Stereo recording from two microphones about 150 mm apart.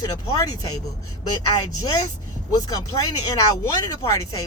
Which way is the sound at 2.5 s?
25° left (ahead or behind).